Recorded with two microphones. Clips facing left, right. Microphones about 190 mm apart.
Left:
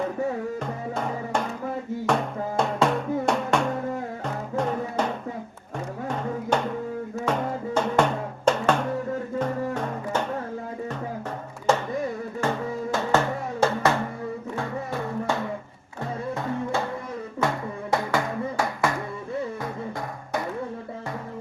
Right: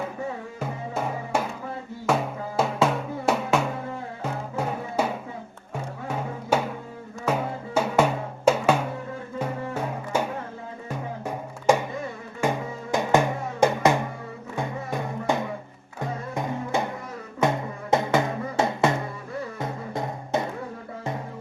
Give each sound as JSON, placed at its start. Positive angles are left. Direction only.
{"t": 0.6, "sound": "music", "side_deg": -5}
{"t": 2.0, "sound": "drum", "side_deg": -5}
{"t": 4.2, "sound": "music", "side_deg": -5}
{"t": 11.7, "sound": "a sound", "side_deg": -10}
{"t": 12.4, "sound": "music", "side_deg": -15}